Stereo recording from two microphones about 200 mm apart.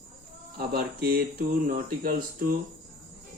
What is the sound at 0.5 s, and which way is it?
Speech, 50° right (ahead or behind).